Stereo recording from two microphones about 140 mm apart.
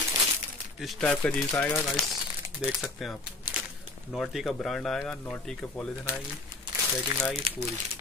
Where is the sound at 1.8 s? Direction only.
5° left (ahead or behind).